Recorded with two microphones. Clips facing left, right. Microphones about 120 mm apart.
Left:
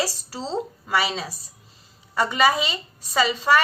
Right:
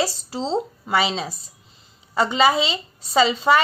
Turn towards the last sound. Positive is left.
turn(degrees=-20)  # may be behind; listen again after turning